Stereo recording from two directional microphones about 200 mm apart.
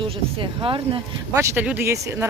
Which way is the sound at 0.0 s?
25° right (ahead or behind).